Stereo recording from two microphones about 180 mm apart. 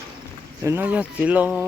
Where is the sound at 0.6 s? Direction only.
10° right (ahead or behind).